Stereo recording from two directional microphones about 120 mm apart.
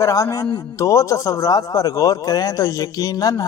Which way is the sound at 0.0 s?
25° left (ahead or behind).